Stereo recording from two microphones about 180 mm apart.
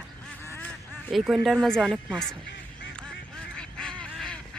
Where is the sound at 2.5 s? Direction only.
80° left.